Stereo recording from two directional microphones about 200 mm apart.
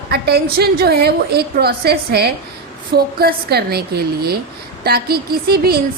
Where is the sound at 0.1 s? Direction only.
50° right (ahead or behind).